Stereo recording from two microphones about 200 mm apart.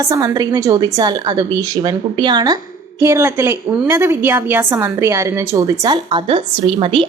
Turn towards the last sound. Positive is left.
turn(degrees=-25)  # may be behind; listen again after turning